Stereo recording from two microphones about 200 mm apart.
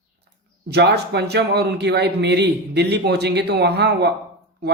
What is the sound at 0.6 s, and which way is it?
Speech, 55° right (ahead or behind).